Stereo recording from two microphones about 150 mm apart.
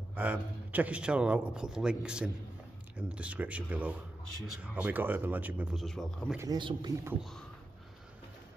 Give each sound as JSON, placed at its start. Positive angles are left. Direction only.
{"t": 0.1, "sound": "a man's voice", "side_deg": -10}
{"t": 6.3, "sound": "speech", "side_deg": -20}
{"t": 7.2, "sound": "speech", "side_deg": 0}